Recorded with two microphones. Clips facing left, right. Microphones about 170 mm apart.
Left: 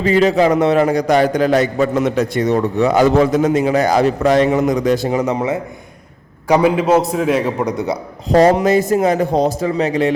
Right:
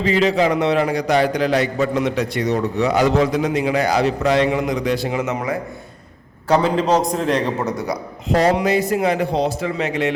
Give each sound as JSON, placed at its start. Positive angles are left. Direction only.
{"t": 0.0, "sound": "a man's voice", "side_deg": 45}
{"t": 6.5, "sound": "a man's voice", "side_deg": 10}
{"t": 8.3, "sound": "a man's voice", "side_deg": 45}